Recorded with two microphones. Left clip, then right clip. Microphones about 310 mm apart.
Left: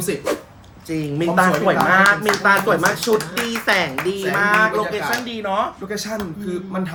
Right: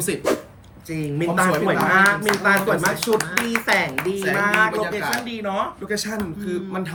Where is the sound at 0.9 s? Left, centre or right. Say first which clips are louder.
Left 3 dB; centre.